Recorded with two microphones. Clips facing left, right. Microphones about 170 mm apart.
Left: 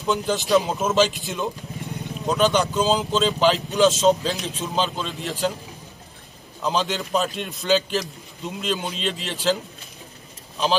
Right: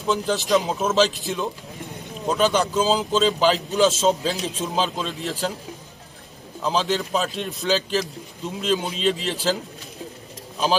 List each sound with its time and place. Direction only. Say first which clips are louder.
0.0 s a man's voice: even; centre (ahead or behind)
4.4 s a man's voice: right 2 dB; 35° right (ahead or behind)
4.7 s a man's voice: left 1 dB; centre (ahead or behind)
6.6 s a man's voice: right 1 dB; centre (ahead or behind)